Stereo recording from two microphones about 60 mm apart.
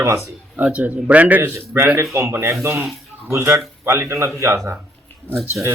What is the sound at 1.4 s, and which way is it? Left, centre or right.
Speech, right.